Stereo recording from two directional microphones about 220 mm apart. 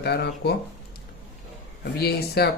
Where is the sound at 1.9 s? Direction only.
45° left (ahead or behind).